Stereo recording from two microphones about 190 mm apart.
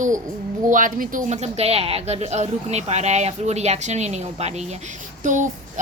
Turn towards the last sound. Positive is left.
turn(degrees=-40)  # may be behind; listen again after turning